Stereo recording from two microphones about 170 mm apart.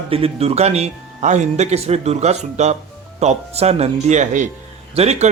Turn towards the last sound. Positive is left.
turn(degrees=-40)  # may be behind; listen again after turning